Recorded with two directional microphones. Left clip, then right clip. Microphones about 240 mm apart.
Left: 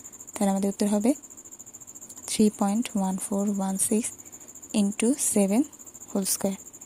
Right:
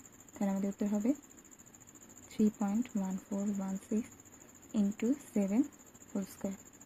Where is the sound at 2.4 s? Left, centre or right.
Left.